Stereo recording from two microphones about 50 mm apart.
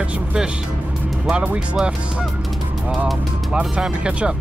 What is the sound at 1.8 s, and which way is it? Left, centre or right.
Speech, centre.